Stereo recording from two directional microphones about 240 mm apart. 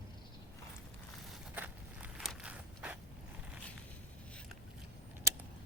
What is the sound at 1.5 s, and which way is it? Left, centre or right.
Walk, centre.